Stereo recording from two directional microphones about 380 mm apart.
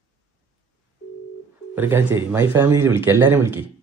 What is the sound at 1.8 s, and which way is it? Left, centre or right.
Speech, centre.